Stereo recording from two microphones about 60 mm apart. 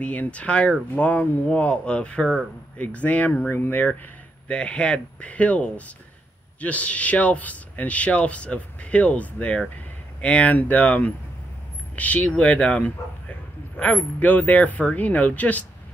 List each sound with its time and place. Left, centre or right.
0.0 s speech: left
4.5 s speech: centre